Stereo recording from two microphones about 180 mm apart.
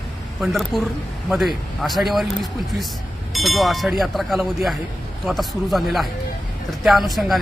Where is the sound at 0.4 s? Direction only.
Centre (ahead or behind).